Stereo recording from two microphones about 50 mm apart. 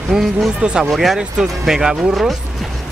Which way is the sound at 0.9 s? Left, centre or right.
Centre.